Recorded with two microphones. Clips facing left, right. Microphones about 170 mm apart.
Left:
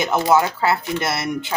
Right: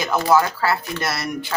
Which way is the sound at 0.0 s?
20° left (ahead or behind).